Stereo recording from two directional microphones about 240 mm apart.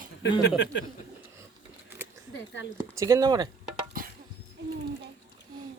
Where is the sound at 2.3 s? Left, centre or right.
Left.